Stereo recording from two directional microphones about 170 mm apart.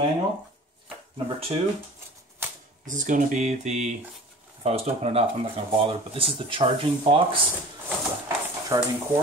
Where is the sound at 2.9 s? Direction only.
50° right (ahead or behind); by 7.4 s 30° right (ahead or behind).